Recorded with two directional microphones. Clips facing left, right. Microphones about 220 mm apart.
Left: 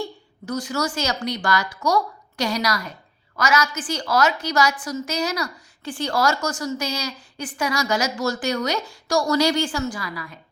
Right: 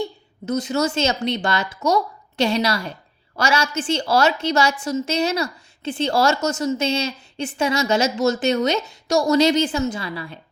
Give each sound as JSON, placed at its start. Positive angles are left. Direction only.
{"t": 0.0, "sound": "a woman's voice", "side_deg": -20}